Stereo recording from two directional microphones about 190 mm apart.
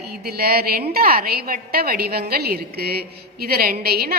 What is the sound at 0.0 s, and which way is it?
A woman's voice, 55° right (ahead or behind).